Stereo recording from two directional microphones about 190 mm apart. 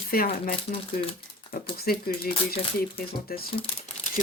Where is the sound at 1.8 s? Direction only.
50° left (ahead or behind).